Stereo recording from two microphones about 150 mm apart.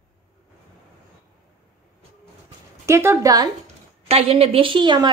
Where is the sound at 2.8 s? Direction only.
20° right (ahead or behind).